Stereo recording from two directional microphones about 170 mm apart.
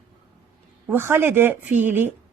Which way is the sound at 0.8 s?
10° right (ahead or behind).